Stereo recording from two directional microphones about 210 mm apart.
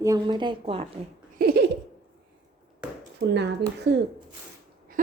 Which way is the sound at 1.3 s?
45° right (ahead or behind).